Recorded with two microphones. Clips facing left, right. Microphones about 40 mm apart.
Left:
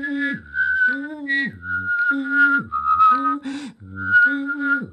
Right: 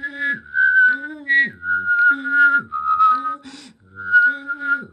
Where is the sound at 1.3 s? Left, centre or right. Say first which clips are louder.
Right 6 dB; right.